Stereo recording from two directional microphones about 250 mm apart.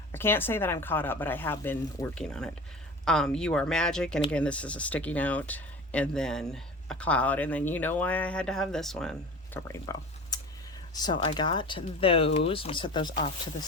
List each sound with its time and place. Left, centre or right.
0.1 s speech: centre